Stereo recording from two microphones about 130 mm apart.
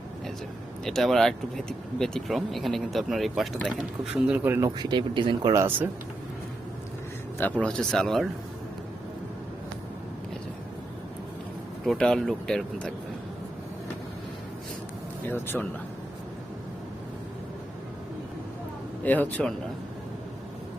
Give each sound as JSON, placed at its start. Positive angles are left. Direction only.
{"t": 0.9, "sound": "speech", "side_deg": 0}
{"t": 4.8, "sound": "speech", "side_deg": -35}
{"t": 5.5, "sound": "speech", "side_deg": -15}
{"t": 7.6, "sound": "speech", "side_deg": 5}
{"t": 11.9, "sound": "speech", "side_deg": 5}
{"t": 15.3, "sound": "a man's voice", "side_deg": 15}
{"t": 19.0, "sound": "a man's voice", "side_deg": 15}